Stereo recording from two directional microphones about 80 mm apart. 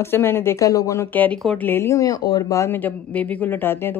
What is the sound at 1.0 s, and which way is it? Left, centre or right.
Speech, left.